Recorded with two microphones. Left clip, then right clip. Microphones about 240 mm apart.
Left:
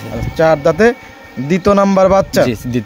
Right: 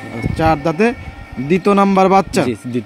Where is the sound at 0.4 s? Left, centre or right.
Centre.